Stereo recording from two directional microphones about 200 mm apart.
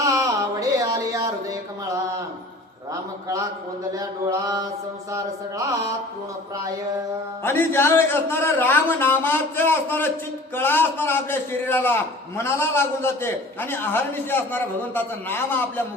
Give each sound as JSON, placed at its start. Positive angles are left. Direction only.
{"t": 0.0, "sound": "a sound", "side_deg": -15}
{"t": 3.2, "sound": "mantra", "side_deg": -15}
{"t": 7.4, "sound": "a man's voice", "side_deg": 10}